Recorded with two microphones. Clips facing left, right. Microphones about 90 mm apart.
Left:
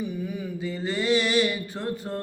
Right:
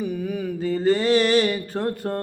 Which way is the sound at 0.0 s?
50° right (ahead or behind).